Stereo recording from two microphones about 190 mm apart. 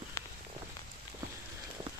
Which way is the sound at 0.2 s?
15° left (ahead or behind).